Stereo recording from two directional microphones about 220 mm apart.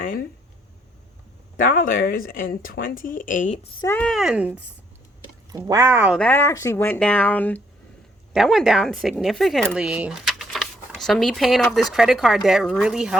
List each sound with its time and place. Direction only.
0.0 s speech: 40° left (ahead or behind)
1.5 s speech: 40° left (ahead or behind)
3.8 s speech: 10° left (ahead or behind)
5.5 s speech: 15° right (ahead or behind)
6.1 s speech: 10° left (ahead or behind)